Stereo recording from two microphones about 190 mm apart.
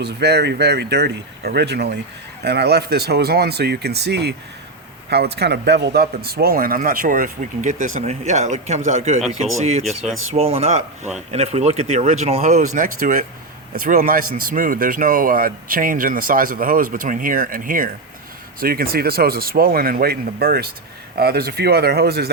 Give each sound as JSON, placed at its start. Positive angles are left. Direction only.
{"t": 0.0, "sound": "speech", "side_deg": -60}
{"t": 9.8, "sound": "speech", "side_deg": 0}
{"t": 10.3, "sound": "speech", "side_deg": -35}